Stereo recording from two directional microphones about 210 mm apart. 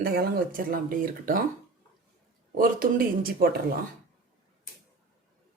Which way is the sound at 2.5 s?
45° right (ahead or behind).